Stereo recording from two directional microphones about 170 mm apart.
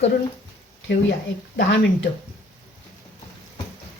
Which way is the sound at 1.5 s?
90° left.